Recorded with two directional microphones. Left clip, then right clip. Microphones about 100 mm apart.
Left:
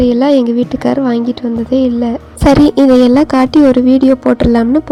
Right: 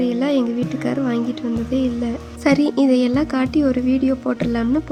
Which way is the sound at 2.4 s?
50° left (ahead or behind).